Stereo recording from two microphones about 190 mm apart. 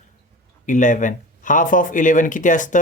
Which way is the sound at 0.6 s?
40° left (ahead or behind).